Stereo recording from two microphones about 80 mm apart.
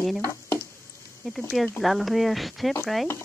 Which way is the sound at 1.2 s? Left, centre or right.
Centre.